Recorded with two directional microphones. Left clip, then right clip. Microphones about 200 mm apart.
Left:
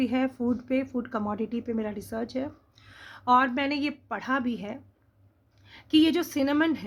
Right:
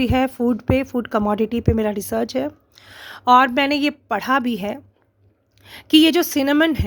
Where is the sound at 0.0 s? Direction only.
45° right (ahead or behind).